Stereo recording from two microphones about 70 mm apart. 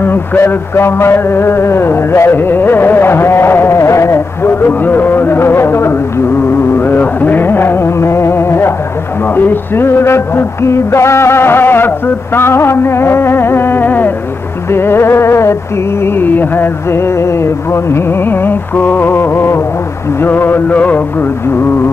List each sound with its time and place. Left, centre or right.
0.0 s a sound: left
6.8 s music: left
16.0 s music: left